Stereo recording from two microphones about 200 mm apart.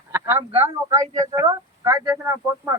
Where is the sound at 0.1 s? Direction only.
10° right (ahead or behind).